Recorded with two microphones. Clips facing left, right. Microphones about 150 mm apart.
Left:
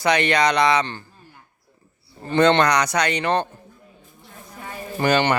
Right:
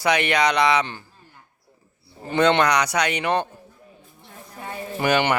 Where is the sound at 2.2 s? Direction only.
10° right (ahead or behind).